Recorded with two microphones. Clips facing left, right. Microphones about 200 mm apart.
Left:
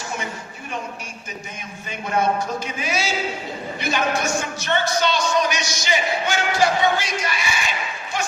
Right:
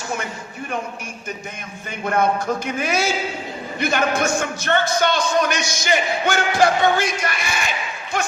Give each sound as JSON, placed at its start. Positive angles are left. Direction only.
{"t": 1.9, "sound": "a man's voice", "side_deg": -55}